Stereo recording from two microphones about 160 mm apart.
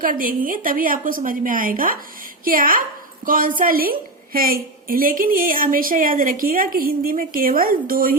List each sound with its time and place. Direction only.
0.0 s a woman's voice: 60° right (ahead or behind)